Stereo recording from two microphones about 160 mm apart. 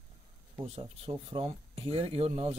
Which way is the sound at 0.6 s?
40° right (ahead or behind).